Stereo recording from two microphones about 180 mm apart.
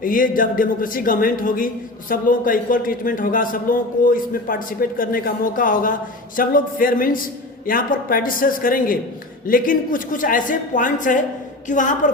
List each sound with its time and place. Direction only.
0.0 s a man's voice: 50° left (ahead or behind)